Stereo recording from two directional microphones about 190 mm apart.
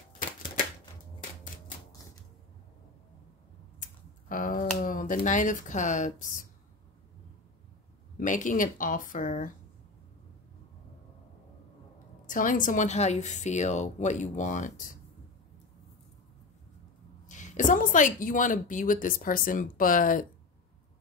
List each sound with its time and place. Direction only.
4.3 s a woman's voice: 45° left (ahead or behind)
8.2 s a woman's voice: 40° left (ahead or behind)
12.3 s a woman's voice: 45° left (ahead or behind)
17.3 s a woman's voice: 40° left (ahead or behind)